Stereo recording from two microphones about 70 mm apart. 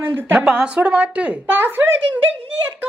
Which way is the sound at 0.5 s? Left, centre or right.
Centre.